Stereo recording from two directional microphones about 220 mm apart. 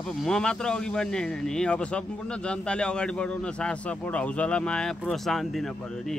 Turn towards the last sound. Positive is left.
turn(degrees=0)  # may be behind; listen again after turning